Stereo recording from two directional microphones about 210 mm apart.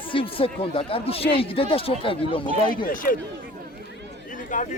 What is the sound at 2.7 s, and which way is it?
Speech, 40° left (ahead or behind).